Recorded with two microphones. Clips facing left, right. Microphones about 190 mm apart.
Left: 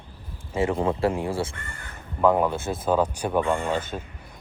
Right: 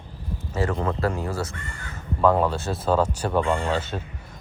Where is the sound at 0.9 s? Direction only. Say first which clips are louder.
Left 2 dB; 30° left (ahead or behind).